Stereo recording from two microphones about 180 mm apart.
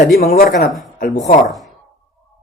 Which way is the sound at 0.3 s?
55° left (ahead or behind).